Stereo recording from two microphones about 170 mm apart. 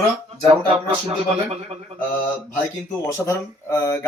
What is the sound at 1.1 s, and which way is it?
Speech, 35° right (ahead or behind).